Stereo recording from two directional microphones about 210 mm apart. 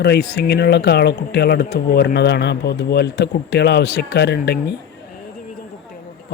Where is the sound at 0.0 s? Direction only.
55° left (ahead or behind).